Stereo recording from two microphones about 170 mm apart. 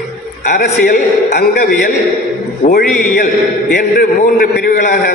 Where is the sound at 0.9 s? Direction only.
45° left (ahead or behind).